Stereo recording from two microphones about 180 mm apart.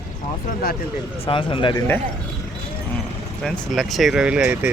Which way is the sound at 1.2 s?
30° left (ahead or behind).